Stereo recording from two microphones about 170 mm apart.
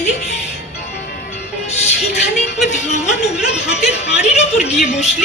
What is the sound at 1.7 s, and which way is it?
Speech, 40° left (ahead or behind).